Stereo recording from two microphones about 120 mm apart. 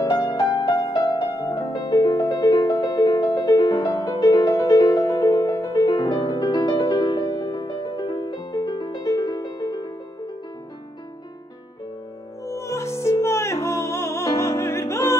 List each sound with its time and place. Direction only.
0.0 s music: 35° left (ahead or behind)
12.4 s music: 25° left (ahead or behind)